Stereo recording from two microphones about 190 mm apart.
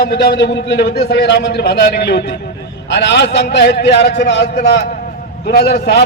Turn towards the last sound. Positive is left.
turn(degrees=60)  # may be behind; listen again after turning